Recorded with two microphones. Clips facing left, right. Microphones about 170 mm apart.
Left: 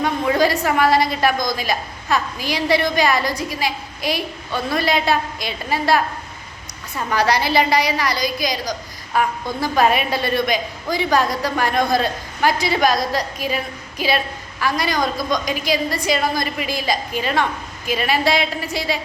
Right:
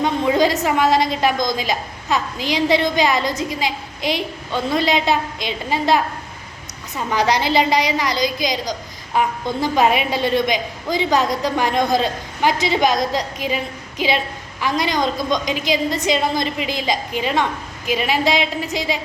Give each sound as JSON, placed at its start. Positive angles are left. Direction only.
{"t": 0.0, "sound": "a woman's voice", "side_deg": -20}